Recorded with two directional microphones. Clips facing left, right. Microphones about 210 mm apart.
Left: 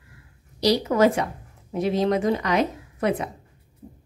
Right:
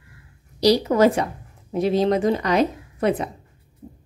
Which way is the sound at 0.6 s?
35° right (ahead or behind).